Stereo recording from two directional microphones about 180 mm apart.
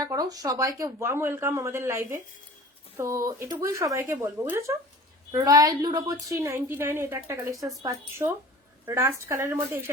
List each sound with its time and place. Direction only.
0.0 s speech: 20° right (ahead or behind)